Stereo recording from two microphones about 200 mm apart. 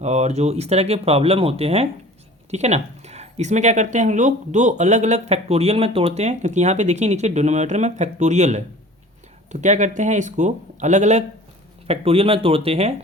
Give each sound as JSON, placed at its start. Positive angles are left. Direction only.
{"t": 0.0, "sound": "speech", "side_deg": -35}